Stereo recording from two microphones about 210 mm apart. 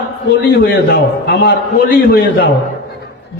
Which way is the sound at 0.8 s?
55° left (ahead or behind).